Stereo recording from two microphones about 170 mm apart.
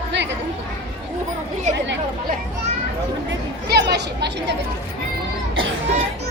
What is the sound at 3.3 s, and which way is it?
Chatter, 75° right (ahead or behind).